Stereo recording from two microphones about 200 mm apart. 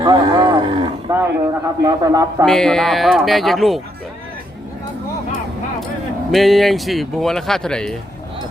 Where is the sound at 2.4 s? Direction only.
Centre (ahead or behind).